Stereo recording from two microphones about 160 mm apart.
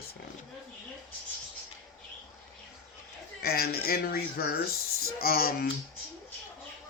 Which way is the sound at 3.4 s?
75° left (ahead or behind).